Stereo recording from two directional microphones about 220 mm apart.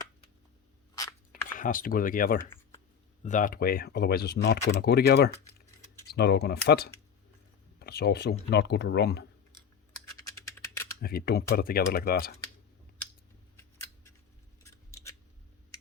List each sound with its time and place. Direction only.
1.5 s speech: 40° left (ahead or behind)
10.2 s a sound: 15° left (ahead or behind)
11.0 s speech: 45° left (ahead or behind)
14.6 s scissors: 15° left (ahead or behind)